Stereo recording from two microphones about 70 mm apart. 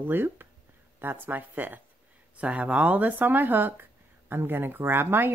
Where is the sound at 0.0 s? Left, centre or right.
Right.